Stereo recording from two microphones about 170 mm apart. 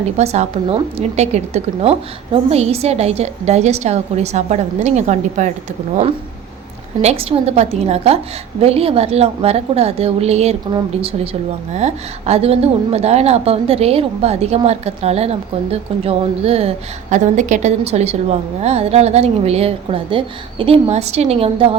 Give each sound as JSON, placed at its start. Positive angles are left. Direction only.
{"t": 0.2, "sound": "a woman's voice", "side_deg": -40}
{"t": 7.0, "sound": "a woman's voice", "side_deg": -35}
{"t": 11.7, "sound": "a woman's voice", "side_deg": -40}